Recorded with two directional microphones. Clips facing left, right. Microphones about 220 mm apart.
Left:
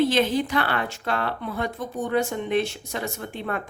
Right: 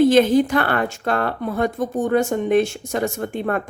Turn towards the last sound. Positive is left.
turn(degrees=-50)  # may be behind; listen again after turning